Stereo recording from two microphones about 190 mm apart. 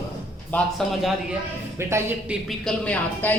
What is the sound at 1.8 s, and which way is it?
Speech, 15° right (ahead or behind).